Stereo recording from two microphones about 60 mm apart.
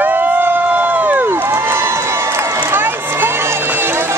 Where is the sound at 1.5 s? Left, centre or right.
Right.